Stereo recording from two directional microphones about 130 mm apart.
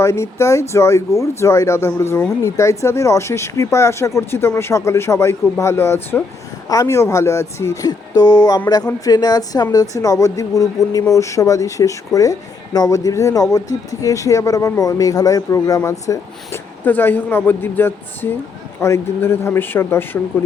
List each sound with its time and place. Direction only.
0.0 s speech: 20° left (ahead or behind)